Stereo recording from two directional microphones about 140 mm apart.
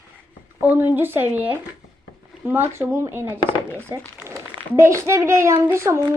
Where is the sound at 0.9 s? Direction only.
15° right (ahead or behind).